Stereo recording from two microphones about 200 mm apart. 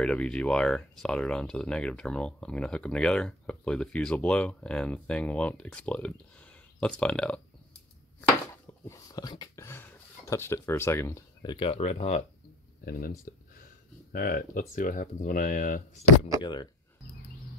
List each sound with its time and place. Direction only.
0.0 s speech: 5° left (ahead or behind)
8.8 s speech: 15° left (ahead or behind)
11.5 s speech: 30° left (ahead or behind)
12.8 s speech: 45° left (ahead or behind)
14.1 s speech: 45° left (ahead or behind)